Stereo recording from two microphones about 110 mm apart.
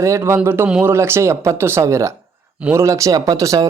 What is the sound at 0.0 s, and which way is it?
Speech, 25° right (ahead or behind).